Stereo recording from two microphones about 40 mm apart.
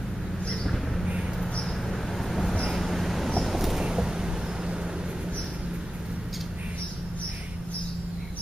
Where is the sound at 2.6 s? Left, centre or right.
Centre.